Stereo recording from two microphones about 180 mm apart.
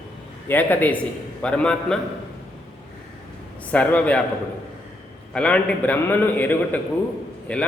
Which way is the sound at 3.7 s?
10° left (ahead or behind).